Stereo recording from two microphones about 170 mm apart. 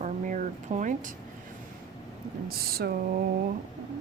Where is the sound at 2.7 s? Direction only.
65° right (ahead or behind).